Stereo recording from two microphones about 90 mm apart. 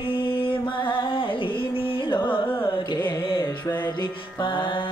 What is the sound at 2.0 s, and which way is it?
Carnatic music, 65° left (ahead or behind).